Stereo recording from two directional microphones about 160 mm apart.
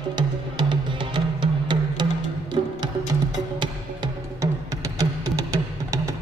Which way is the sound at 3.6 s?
25° right (ahead or behind).